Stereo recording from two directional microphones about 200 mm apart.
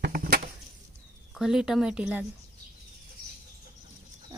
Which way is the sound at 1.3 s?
Centre (ahead or behind).